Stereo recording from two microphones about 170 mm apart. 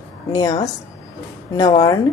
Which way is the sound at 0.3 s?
20° left (ahead or behind).